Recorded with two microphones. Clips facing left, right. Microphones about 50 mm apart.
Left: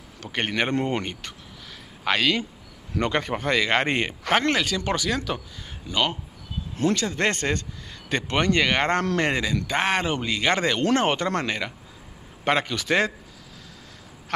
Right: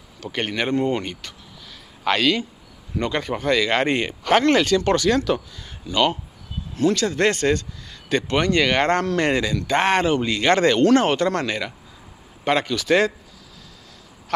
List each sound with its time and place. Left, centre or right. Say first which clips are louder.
0.2 s speech: right 1 dB; left
2.0 s speech: right 3 dB; centre
3.1 s speech: right 3 dB; left
4.5 s speech: right 7 dB; centre
5.9 s speech: right 5 dB; left